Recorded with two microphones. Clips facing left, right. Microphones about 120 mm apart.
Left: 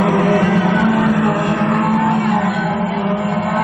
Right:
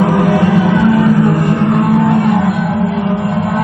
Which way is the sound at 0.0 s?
10° right (ahead or behind).